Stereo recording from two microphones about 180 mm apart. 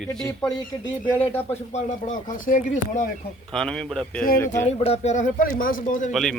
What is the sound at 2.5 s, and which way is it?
Speech, 45° left (ahead or behind).